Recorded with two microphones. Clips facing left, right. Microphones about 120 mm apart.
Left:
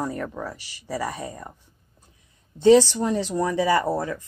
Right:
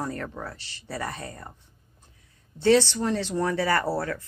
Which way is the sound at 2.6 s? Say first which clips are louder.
Left 5 dB; 15° left (ahead or behind).